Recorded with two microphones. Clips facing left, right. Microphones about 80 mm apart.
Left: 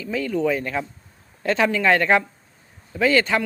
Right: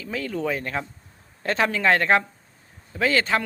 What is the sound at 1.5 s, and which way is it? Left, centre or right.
Speech, right.